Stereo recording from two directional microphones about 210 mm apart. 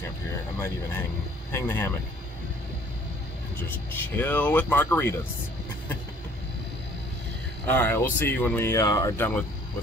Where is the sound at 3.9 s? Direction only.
10° left (ahead or behind).